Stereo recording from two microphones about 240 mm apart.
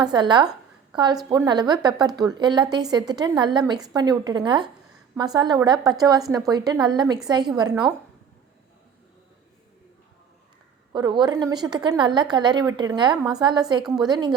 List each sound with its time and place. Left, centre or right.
0.0 s a woman's voice: centre
10.9 s a woman's voice: centre
13.8 s a woman's voice: centre
14.1 s a woman's voice: centre